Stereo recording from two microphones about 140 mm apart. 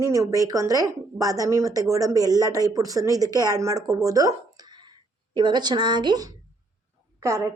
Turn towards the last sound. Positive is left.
turn(degrees=-20)  # may be behind; listen again after turning